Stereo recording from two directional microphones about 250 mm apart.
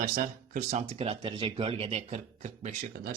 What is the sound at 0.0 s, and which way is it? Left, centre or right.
Speech, right.